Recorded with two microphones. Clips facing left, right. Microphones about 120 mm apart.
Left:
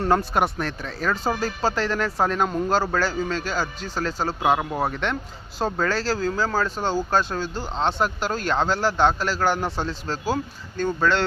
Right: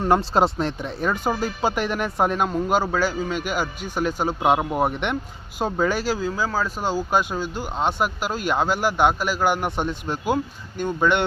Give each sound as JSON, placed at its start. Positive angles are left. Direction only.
{"t": 0.0, "sound": "speech", "side_deg": -25}